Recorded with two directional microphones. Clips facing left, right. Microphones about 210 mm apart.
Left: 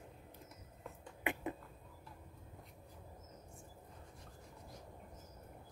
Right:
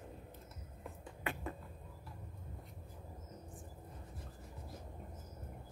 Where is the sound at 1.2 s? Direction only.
15° left (ahead or behind).